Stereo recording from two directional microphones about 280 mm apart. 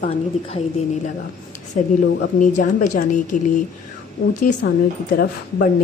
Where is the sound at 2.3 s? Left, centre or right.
Left.